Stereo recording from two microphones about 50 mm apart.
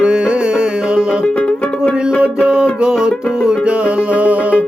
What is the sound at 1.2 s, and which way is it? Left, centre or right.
Music, left.